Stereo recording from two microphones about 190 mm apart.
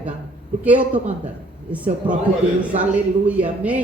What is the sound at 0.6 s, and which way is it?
Speech, 10° right (ahead or behind).